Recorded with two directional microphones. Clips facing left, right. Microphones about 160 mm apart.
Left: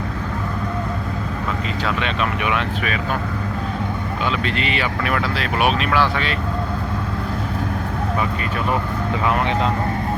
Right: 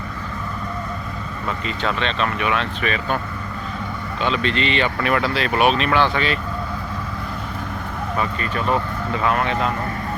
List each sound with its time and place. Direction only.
1.8 s speech: 10° left (ahead or behind)
4.3 s speech: 5° left (ahead or behind)
9.2 s speech: 20° left (ahead or behind)